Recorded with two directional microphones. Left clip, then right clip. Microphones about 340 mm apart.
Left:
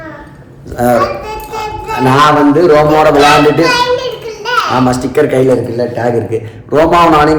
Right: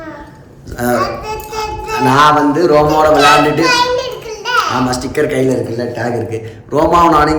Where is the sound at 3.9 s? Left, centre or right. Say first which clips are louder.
Left 3 dB; centre.